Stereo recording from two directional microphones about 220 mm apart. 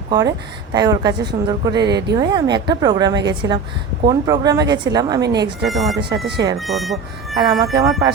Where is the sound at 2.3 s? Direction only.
20° right (ahead or behind).